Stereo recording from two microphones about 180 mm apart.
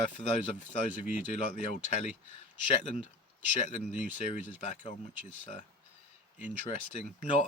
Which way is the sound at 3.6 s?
45° left (ahead or behind).